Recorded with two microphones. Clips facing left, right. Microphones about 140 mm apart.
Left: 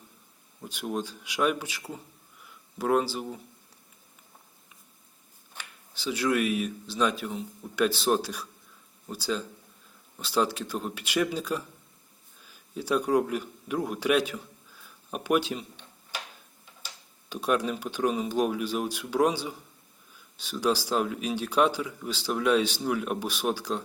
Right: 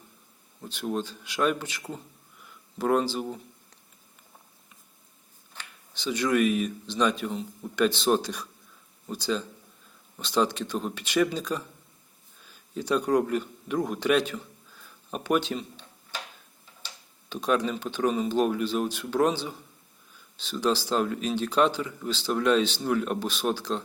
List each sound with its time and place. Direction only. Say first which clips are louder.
0.6 s speech: right 2 dB; 10° left (ahead or behind)
2.4 s a sound: right 2 dB; 5° left (ahead or behind)
5.5 s speech: even; 5° left (ahead or behind)
16.8 s speech: even; 10° left (ahead or behind)